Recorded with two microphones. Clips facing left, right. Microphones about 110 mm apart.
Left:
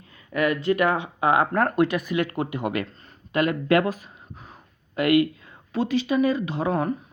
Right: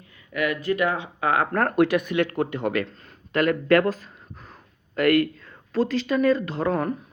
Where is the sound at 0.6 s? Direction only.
25° left (ahead or behind).